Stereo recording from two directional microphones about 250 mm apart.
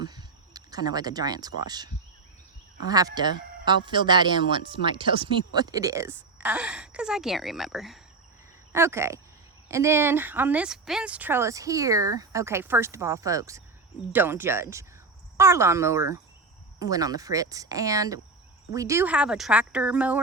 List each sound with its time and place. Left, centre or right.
0.0 s speech: centre
2.9 s speech: centre